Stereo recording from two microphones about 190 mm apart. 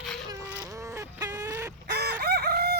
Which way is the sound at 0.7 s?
15° right (ahead or behind).